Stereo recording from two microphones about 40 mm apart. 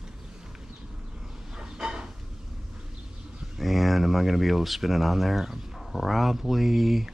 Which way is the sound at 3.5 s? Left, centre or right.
Centre.